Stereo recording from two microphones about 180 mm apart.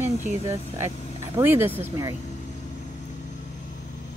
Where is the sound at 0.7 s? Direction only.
15° right (ahead or behind).